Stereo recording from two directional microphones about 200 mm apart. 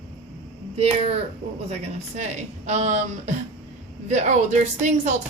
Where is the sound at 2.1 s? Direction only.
35° right (ahead or behind).